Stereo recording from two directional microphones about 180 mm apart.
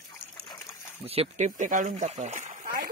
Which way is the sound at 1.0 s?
35° right (ahead or behind).